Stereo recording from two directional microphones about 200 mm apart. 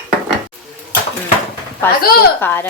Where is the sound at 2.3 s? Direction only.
10° left (ahead or behind).